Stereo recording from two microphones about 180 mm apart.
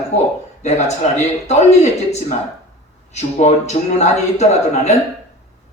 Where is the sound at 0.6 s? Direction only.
40° left (ahead or behind).